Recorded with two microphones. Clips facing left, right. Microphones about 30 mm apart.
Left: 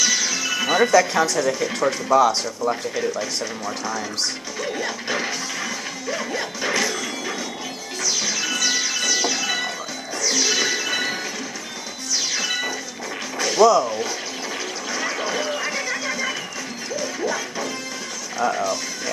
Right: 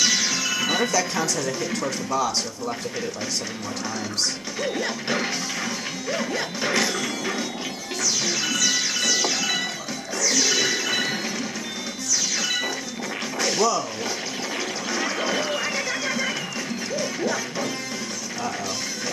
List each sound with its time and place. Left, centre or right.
0.0 s music: right
0.7 s music: centre
0.9 s speech: left
4.6 s music: centre
6.7 s music: right
7.0 s music: centre
8.0 s music: left
8.3 s music: right
8.5 s music: left
12.1 s music: left
13.6 s speech: left
15.9 s a sound: right